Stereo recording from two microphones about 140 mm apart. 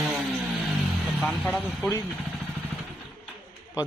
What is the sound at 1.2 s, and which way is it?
Speech, centre (ahead or behind).